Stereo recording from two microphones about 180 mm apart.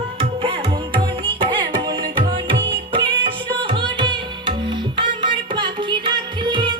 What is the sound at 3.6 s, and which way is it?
Carnatic music, 25° right (ahead or behind).